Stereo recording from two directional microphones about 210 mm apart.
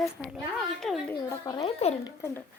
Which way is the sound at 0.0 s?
Centre (ahead or behind).